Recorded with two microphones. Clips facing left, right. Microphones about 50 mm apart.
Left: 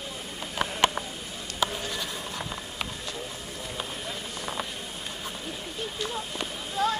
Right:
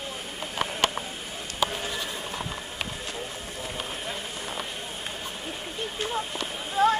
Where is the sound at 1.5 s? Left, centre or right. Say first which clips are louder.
Right 1 dB; centre.